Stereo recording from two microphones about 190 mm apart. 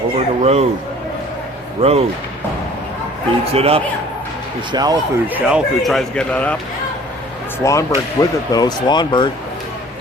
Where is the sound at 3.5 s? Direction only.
30° right (ahead or behind).